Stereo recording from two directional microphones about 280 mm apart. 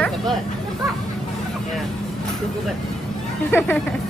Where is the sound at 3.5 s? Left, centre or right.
Centre.